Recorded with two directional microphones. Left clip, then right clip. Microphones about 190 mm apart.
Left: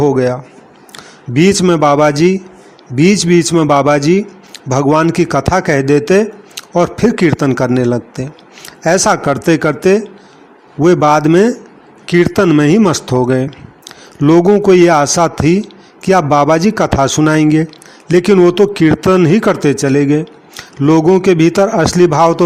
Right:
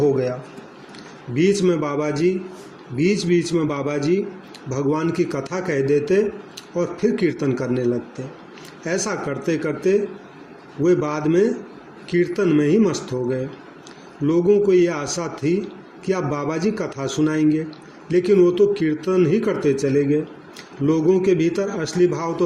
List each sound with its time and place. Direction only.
0.0 s a man's voice: 50° left (ahead or behind)